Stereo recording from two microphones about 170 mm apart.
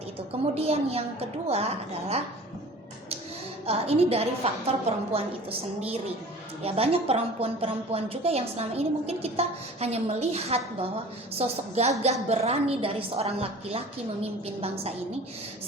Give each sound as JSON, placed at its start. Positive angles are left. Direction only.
{"t": 0.6, "sound": "a woman's voice", "side_deg": -35}
{"t": 3.7, "sound": "a woman's voice", "side_deg": -35}